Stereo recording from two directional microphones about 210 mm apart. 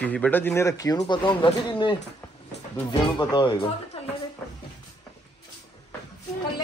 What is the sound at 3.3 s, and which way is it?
Speech, 20° left (ahead or behind).